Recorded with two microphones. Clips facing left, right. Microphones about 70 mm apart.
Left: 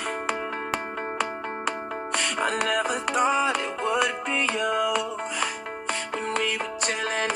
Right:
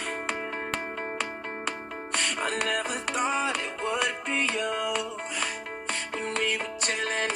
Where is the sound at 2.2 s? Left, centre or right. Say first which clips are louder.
Left 4 dB; left.